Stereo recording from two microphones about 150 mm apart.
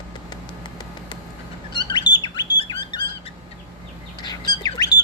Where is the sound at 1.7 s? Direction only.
30° left (ahead or behind).